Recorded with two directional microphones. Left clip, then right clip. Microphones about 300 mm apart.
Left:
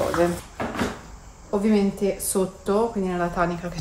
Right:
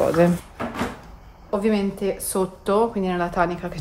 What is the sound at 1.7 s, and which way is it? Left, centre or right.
Speech, centre.